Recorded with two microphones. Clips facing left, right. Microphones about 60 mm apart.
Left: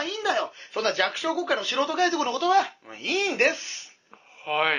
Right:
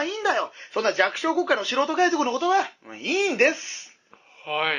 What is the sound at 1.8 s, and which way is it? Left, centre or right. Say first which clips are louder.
Speech: right 2 dB; right.